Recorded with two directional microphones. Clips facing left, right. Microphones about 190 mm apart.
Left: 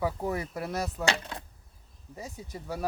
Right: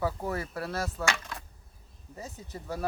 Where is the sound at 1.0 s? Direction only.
35° left (ahead or behind).